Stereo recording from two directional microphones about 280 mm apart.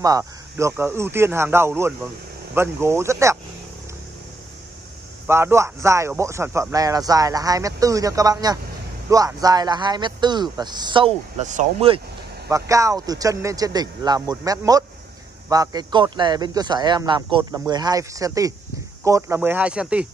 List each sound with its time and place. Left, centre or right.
0.0 s a man's voice: centre
5.2 s a man's voice: centre
12.4 s a man's voice: centre